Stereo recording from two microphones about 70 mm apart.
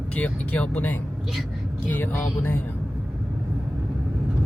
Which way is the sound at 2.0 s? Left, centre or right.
Left.